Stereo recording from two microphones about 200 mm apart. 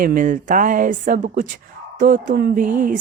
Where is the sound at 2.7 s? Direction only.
40° right (ahead or behind).